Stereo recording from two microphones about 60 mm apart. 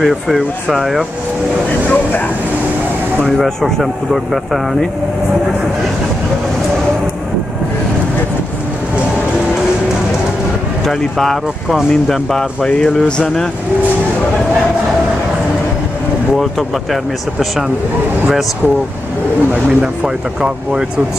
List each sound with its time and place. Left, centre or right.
0.0 s speech: centre
3.3 s speech: centre
10.9 s speech: centre
16.3 s speech: centre
19.5 s speech: right